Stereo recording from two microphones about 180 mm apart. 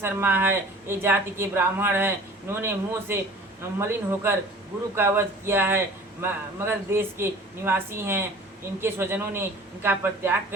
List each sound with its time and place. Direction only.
0.0 s speech: 10° right (ahead or behind)